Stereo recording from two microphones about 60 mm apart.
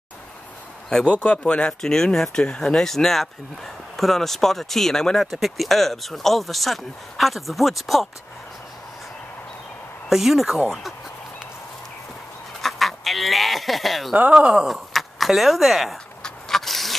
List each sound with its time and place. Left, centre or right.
0.8 s speech: centre
10.0 s speech: centre
12.6 s duck: centre
14.3 s speech: centre
14.7 s speech: centre
16.2 s scrape: centre